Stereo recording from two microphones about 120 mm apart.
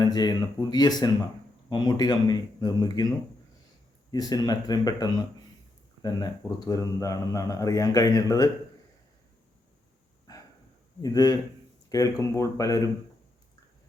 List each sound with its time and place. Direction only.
0.0 s speech: 35° left (ahead or behind)
4.1 s speech: 35° left (ahead or behind)
11.0 s speech: 35° left (ahead or behind)